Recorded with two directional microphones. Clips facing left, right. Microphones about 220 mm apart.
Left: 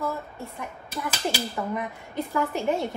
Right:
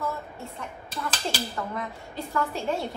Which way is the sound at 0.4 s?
15° left (ahead or behind).